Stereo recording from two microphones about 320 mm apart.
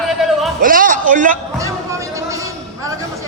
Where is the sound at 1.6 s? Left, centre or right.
Centre.